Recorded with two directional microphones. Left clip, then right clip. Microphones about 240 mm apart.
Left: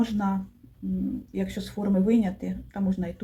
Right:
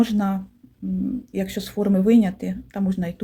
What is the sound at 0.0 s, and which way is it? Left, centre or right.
Speech, right.